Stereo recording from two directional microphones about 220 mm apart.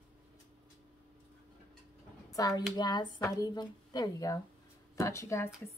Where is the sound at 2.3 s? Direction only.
15° left (ahead or behind).